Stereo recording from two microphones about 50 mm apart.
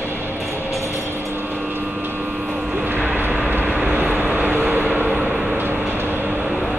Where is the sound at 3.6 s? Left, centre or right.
Centre.